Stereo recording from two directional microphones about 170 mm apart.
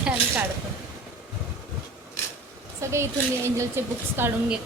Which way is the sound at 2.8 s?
15° right (ahead or behind).